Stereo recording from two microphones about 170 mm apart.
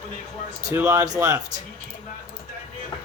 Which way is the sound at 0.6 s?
20° right (ahead or behind).